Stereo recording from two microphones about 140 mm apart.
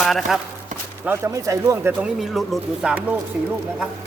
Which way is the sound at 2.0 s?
Centre (ahead or behind).